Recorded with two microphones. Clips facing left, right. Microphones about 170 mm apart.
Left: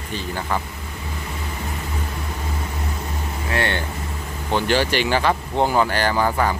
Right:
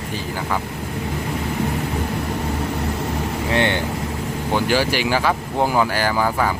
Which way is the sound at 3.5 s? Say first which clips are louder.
Right 3 dB; 20° right (ahead or behind).